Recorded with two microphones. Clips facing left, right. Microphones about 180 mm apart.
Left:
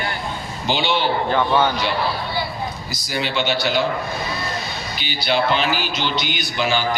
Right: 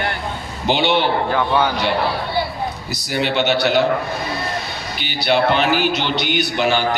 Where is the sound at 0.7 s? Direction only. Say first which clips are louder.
Right 3 dB; 60° right (ahead or behind).